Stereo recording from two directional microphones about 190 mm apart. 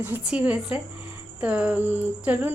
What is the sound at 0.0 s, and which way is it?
Speech, 10° right (ahead or behind).